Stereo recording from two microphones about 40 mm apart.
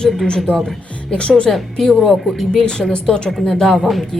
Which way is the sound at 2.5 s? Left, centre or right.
Centre.